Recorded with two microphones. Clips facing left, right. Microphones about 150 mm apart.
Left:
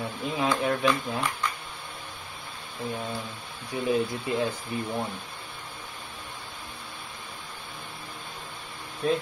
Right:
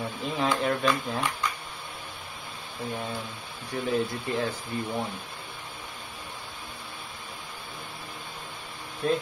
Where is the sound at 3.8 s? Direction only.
20° left (ahead or behind).